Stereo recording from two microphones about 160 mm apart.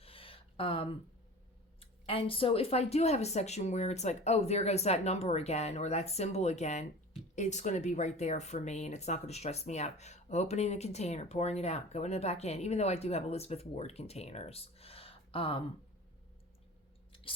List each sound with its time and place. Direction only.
0.0 s a sound: 35° left (ahead or behind)
1.8 s speech: 35° left (ahead or behind)
17.1 s chewing: 35° left (ahead or behind)